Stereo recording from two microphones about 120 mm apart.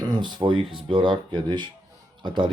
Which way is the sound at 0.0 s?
35° right (ahead or behind).